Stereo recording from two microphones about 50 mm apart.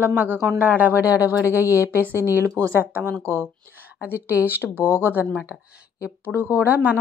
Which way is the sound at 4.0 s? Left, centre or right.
Right.